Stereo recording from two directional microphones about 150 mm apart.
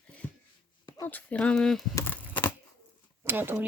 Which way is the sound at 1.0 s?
10° left (ahead or behind).